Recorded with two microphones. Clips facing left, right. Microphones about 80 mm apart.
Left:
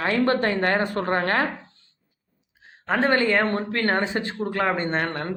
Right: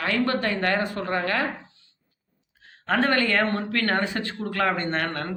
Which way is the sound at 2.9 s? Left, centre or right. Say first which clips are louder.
Left 2 dB; left.